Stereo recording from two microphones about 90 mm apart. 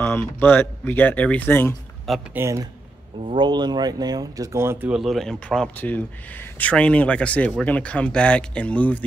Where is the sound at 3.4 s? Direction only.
55° right (ahead or behind); by 4.9 s 30° right (ahead or behind).